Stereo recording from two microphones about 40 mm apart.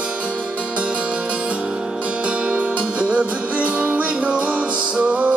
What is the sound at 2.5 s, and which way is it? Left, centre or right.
Music, right.